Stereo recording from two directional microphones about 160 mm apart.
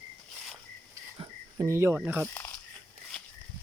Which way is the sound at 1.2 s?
20° right (ahead or behind).